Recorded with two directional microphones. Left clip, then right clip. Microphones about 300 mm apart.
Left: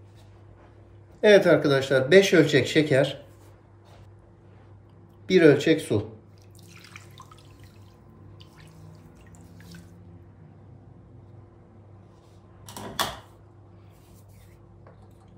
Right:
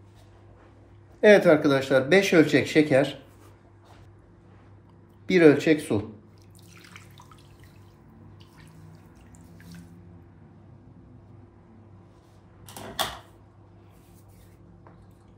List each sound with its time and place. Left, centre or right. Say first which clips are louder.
1.2 s speech: even; centre
5.2 s speech: even; centre